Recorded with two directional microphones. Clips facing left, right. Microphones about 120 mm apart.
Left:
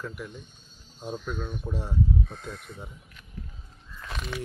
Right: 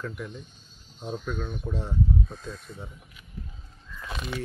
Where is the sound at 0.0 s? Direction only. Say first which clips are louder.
Right 2 dB; 5° left (ahead or behind).